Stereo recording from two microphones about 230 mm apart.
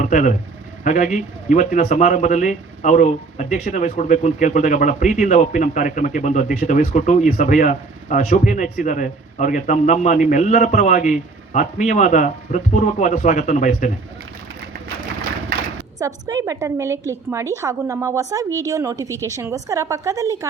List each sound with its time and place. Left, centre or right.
0.0 s speech: left
16.0 s a woman's voice: centre